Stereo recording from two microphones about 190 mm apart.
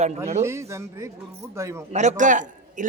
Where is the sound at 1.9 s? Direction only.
40° right (ahead or behind).